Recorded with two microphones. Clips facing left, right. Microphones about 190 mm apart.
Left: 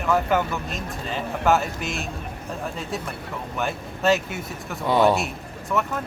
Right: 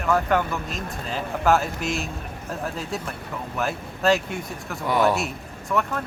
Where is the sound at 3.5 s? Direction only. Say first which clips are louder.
Right 1 dB; centre (ahead or behind).